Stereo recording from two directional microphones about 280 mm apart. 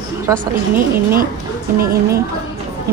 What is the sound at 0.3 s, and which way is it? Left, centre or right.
Speech, centre.